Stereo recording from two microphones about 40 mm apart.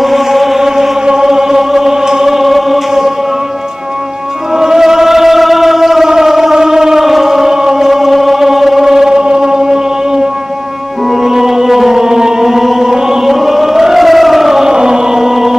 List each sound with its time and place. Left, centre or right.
0.0 s chant: centre
4.6 s a sound: centre
6.5 s chant: centre
9.2 s a sound: centre
11.1 s music: centre
14.7 s chant: centre